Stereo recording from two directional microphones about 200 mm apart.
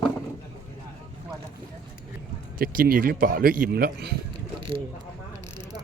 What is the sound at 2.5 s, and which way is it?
A man's voice, 45° right (ahead or behind).